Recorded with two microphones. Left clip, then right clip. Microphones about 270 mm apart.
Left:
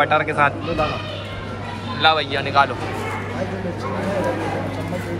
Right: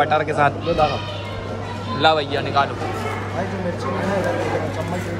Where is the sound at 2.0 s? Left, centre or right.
Centre.